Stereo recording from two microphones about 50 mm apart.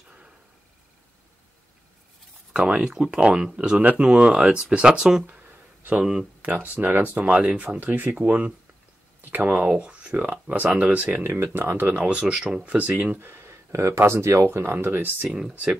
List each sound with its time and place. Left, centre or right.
2.5 s speech: right
5.2 s a sound: right
6.4 s speech: right
7.8 s speech: right
11.2 s speech: right
11.9 s speech: right
12.6 s speech: right
13.2 s a sound: right
13.7 s speech: right
14.6 s speech: right
15.2 s speech: centre